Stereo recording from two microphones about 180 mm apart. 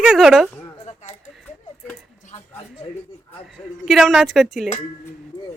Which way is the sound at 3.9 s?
Centre (ahead or behind).